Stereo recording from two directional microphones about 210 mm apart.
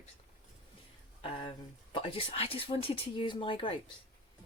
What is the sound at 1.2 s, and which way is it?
Speech, 20° left (ahead or behind).